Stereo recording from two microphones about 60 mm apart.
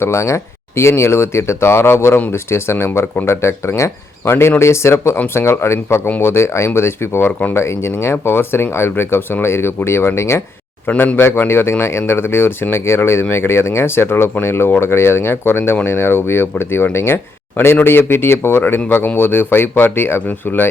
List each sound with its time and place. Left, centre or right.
0.0 s speech: left
10.8 s speech: left